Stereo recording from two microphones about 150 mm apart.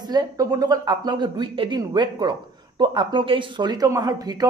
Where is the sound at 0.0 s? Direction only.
25° right (ahead or behind).